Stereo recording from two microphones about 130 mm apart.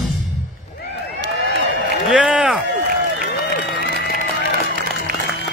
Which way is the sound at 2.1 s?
5° right (ahead or behind).